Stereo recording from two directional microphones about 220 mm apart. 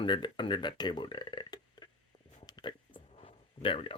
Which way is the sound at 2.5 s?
20° left (ahead or behind).